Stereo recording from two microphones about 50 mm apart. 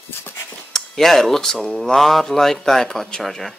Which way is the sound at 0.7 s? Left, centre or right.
Centre.